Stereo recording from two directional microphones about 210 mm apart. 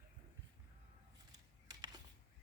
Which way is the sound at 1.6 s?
20° right (ahead or behind).